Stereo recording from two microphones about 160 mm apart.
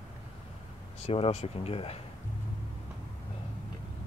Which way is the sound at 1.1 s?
40° left (ahead or behind).